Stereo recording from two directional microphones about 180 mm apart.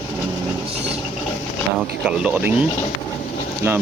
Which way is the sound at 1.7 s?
5° right (ahead or behind).